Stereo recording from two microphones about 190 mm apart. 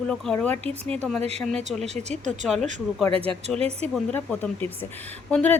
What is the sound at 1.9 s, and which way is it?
Speech, 35° right (ahead or behind).